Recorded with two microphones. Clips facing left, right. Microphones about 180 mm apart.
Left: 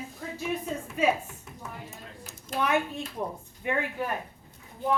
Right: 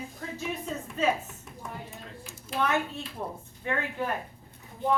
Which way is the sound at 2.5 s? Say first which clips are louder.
Even; 45° left (ahead or behind).